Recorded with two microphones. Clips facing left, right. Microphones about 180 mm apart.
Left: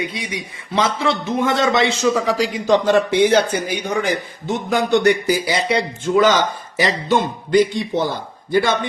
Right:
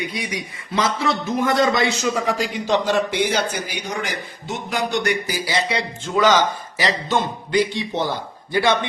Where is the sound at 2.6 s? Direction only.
50° left (ahead or behind).